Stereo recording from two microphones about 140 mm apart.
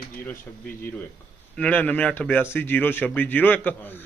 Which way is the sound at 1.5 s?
10° left (ahead or behind).